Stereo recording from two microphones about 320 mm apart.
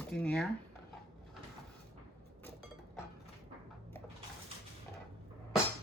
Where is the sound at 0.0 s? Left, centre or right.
Centre.